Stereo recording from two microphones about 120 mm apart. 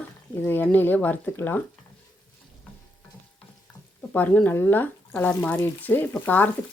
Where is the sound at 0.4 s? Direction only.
15° left (ahead or behind).